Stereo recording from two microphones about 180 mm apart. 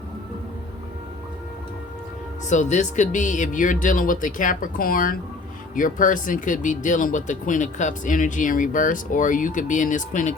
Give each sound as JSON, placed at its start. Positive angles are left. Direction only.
{"t": 2.5, "sound": "speech", "side_deg": 40}